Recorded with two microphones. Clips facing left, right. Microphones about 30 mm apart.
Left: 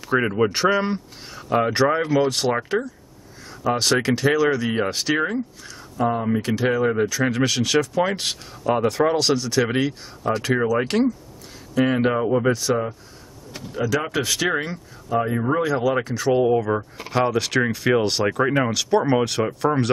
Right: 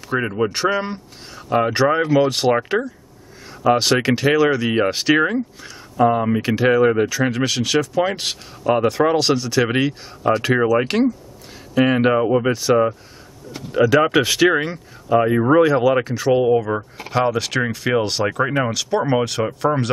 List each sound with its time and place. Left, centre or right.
0.1 s speech: centre; by 7.1 s right
7.1 s speech: centre
10.2 s speech: right
10.8 s speech: centre
13.7 s speech: right
14.5 s speech: centre
15.0 s speech: right
15.7 s speech: centre